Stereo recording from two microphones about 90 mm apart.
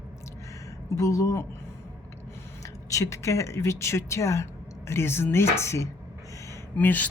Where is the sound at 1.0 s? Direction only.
40° left (ahead or behind).